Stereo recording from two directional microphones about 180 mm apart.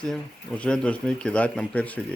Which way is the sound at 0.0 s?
5° left (ahead or behind).